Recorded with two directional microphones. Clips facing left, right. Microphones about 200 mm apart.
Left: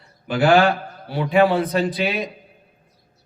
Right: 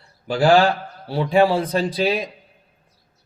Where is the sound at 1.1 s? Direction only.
30° right (ahead or behind).